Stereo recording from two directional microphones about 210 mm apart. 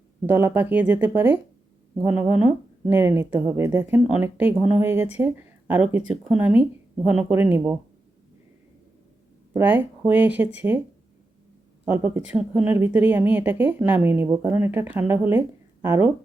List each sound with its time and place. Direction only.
0.3 s a woman's voice: 10° right (ahead or behind)
9.5 s a woman's voice: 10° right (ahead or behind)
11.9 s a woman's voice: 10° right (ahead or behind)